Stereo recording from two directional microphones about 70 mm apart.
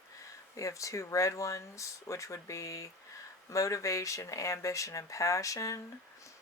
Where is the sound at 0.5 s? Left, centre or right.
Left.